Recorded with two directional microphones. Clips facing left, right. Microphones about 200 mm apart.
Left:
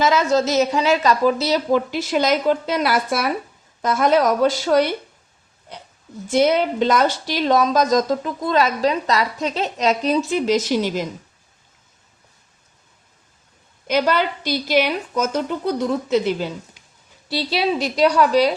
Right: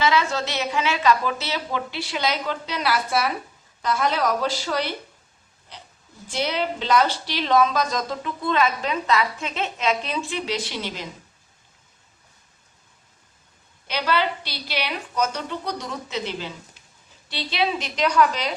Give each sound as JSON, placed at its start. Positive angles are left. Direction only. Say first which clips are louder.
{"t": 0.0, "sound": "a woman's voice", "louder": "left 5 dB", "side_deg": 45}
{"t": 6.2, "sound": "speech", "louder": "left 9 dB", "side_deg": 45}
{"t": 13.8, "sound": "a woman's voice", "louder": "left 5 dB", "side_deg": 45}